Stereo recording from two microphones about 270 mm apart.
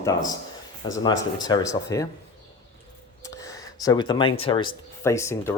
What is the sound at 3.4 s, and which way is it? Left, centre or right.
Speech, centre.